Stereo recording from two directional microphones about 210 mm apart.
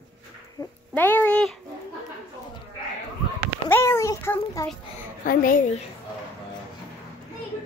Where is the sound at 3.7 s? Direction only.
10° left (ahead or behind).